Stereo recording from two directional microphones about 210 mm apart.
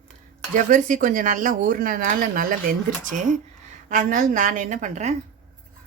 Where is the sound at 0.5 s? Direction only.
35° right (ahead or behind).